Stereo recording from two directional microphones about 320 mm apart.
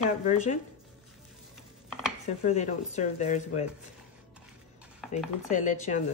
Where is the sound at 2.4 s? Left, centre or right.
Left.